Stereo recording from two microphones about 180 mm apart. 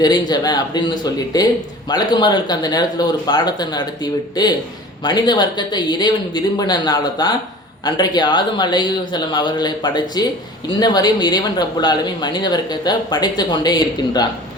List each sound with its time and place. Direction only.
0.0 s speech: 20° left (ahead or behind)